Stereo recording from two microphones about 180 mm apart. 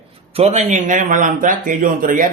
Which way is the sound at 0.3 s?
35° right (ahead or behind).